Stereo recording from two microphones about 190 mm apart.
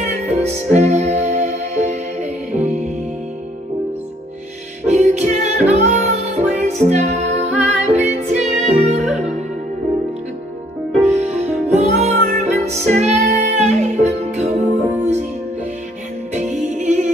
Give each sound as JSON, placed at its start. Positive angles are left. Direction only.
{"t": 0.1, "sound": "music", "side_deg": -35}
{"t": 4.8, "sound": "music", "side_deg": -35}
{"t": 11.0, "sound": "music", "side_deg": -35}
{"t": 16.3, "sound": "music", "side_deg": -40}